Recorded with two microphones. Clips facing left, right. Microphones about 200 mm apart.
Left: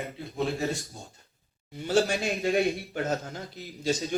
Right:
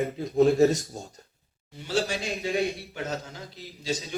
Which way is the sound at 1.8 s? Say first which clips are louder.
Left 3 dB; 50° left (ahead or behind).